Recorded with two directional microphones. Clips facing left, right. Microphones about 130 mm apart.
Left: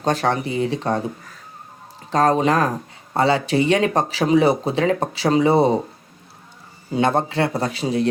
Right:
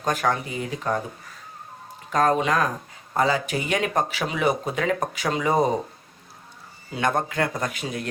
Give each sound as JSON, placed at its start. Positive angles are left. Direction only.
{"t": 0.0, "sound": "speech", "side_deg": 35}
{"t": 2.0, "sound": "speech", "side_deg": 30}
{"t": 6.9, "sound": "speech", "side_deg": 30}